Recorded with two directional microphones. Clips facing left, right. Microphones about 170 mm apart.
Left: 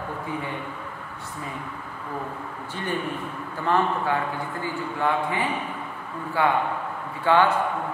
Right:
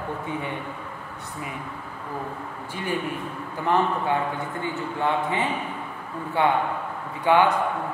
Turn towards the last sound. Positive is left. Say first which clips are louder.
# right 1 dB
turn(degrees=-15)  # may be behind; listen again after turning